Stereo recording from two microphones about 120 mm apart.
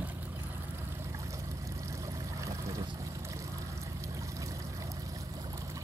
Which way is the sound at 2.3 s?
25° right (ahead or behind).